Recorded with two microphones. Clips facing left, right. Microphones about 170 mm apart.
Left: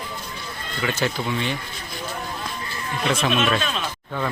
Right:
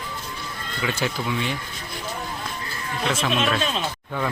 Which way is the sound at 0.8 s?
10° right (ahead or behind).